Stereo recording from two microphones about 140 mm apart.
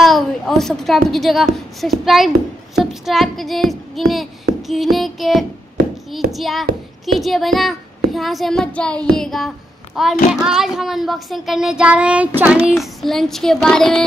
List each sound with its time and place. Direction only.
0.0 s a woman's voice: centre (ahead or behind)
6.3 s child singing: centre (ahead or behind)